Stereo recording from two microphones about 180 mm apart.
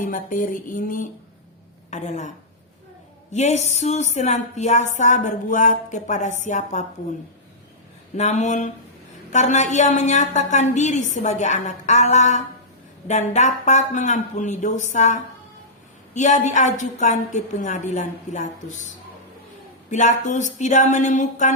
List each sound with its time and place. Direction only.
0.0 s a woman's voice: 45° left (ahead or behind)
3.3 s a woman's voice: 40° left (ahead or behind)
8.1 s a woman's voice: 40° left (ahead or behind)
19.9 s a woman's voice: 40° left (ahead or behind)